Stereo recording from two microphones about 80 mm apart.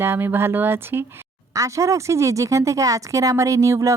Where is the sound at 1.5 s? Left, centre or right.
Right.